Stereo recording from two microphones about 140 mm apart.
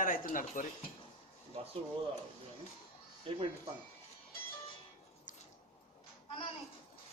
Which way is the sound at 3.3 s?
45° right (ahead or behind).